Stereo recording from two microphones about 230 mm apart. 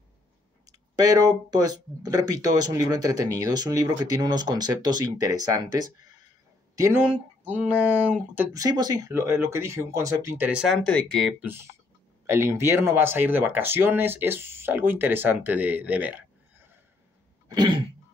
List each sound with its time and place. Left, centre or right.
0.7 s speech: centre
8.4 s speech: centre